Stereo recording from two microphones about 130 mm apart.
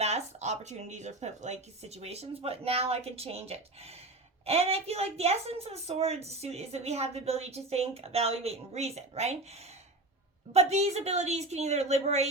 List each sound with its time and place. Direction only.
0.0 s a woman's voice: 60° right (ahead or behind)